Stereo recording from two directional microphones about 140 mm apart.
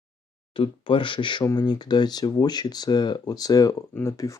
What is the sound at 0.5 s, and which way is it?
Speech, 35° left (ahead or behind).